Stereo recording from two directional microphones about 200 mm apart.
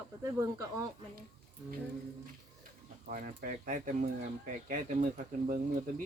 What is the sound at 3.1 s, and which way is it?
Speech, 40° right (ahead or behind).